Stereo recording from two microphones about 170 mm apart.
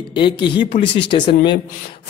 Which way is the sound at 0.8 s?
90° left.